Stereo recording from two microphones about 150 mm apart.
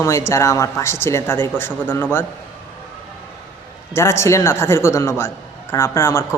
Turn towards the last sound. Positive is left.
turn(degrees=20)  # may be behind; listen again after turning